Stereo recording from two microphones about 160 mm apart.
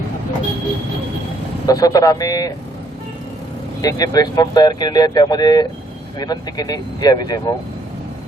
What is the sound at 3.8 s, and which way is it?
Speech, 25° left (ahead or behind).